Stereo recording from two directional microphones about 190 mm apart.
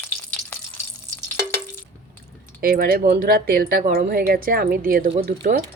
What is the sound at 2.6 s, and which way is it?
Speech, 50° right (ahead or behind).